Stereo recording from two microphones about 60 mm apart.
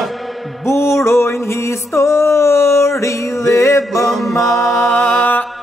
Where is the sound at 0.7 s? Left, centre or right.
Left.